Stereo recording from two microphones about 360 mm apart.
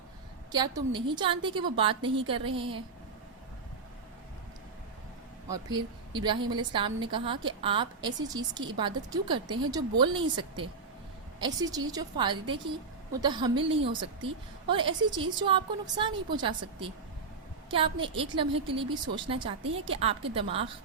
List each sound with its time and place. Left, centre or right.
0.5 s a woman's voice: centre
5.5 s a woman's voice: centre